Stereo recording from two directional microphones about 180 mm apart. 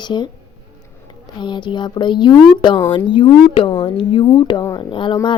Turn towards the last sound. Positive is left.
turn(degrees=25)  # may be behind; listen again after turning